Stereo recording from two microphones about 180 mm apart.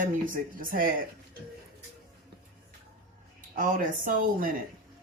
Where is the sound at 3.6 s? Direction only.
45° right (ahead or behind).